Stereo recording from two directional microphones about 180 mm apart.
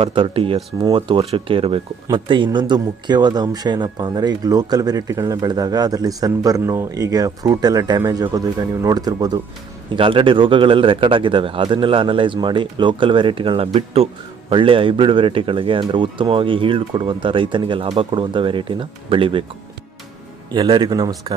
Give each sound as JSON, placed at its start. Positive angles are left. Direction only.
{"t": 0.0, "sound": "speech", "side_deg": -30}
{"t": 20.5, "sound": "speech", "side_deg": -25}